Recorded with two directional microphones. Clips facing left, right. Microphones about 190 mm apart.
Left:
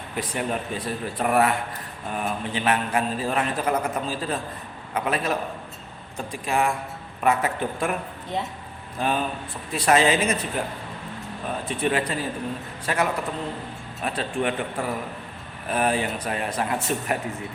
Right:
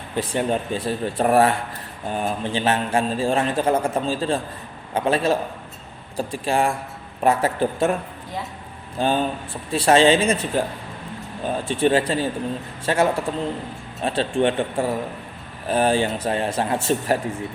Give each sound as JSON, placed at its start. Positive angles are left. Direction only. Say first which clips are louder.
{"t": 0.1, "sound": "a man's voice", "louder": "right 5 dB", "side_deg": -30}
{"t": 9.0, "sound": "a man's voice", "louder": "right 4 dB", "side_deg": -30}